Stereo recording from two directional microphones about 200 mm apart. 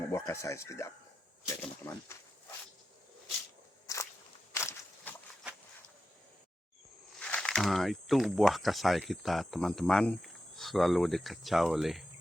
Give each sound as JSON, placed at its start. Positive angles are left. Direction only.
{"t": 0.1, "sound": "speech", "side_deg": 15}
{"t": 3.9, "sound": "walk", "side_deg": 15}
{"t": 7.2, "sound": "speech", "side_deg": 5}